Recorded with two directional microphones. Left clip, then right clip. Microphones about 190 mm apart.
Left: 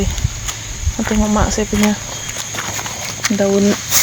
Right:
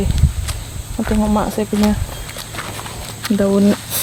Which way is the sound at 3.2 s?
35° left (ahead or behind).